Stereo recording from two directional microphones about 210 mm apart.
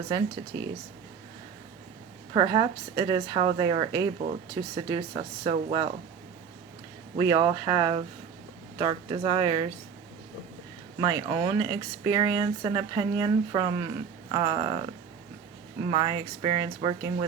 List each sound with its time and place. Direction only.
0.5 s speech: 15° right (ahead or behind)
2.3 s speech: 20° right (ahead or behind)
7.2 s speech: 20° right (ahead or behind)
11.0 s speech: 20° right (ahead or behind)
15.8 s speech: 20° right (ahead or behind)